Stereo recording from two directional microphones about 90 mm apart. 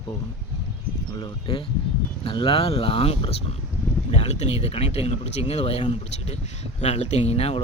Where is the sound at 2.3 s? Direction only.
80° left.